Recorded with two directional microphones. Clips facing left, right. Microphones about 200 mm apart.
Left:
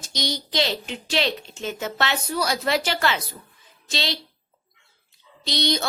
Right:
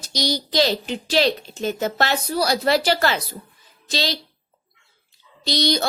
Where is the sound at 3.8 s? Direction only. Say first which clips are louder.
Right 4 dB; 35° right (ahead or behind).